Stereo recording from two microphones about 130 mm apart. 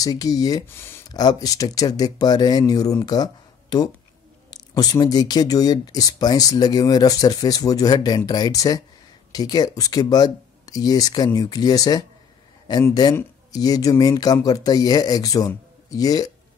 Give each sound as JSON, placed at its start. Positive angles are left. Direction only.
{"t": 0.0, "sound": "speech", "side_deg": 30}
{"t": 0.7, "sound": "speech", "side_deg": 20}
{"t": 1.0, "sound": "speech", "side_deg": 30}
{"t": 13.0, "sound": "speech", "side_deg": 30}